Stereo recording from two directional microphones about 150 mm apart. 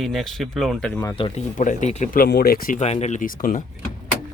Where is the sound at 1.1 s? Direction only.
35° left (ahead or behind).